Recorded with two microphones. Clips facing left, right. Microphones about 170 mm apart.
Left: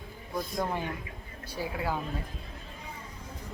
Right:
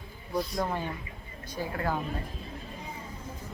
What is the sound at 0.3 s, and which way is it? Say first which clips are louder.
A woman's voice: right 2 dB; centre (ahead or behind).